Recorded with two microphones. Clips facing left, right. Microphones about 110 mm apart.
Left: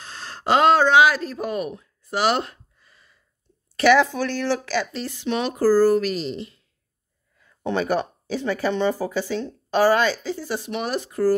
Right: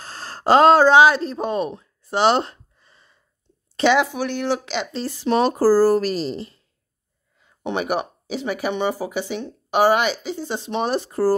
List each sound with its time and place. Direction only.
0.0 s a sound: 40° right (ahead or behind)
3.7 s speech: 20° right (ahead or behind)
4.9 s speech: 35° right (ahead or behind)
7.3 s speech: 20° right (ahead or behind)